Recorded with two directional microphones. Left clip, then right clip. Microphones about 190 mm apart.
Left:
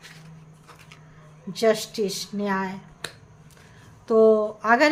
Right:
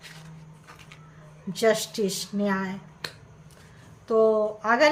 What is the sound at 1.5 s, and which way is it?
Speech, 5° left (ahead or behind).